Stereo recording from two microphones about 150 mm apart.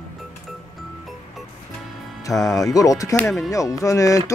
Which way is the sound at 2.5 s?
20° left (ahead or behind).